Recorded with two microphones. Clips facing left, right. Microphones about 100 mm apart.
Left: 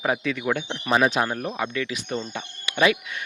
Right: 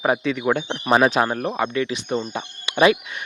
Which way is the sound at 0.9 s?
50° right (ahead or behind).